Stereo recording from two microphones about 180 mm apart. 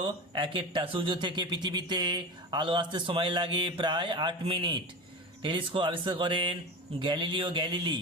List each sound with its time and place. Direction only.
0.0 s speech: 25° right (ahead or behind)